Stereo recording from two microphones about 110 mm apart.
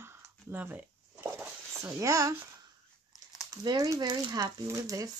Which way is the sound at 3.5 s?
35° right (ahead or behind).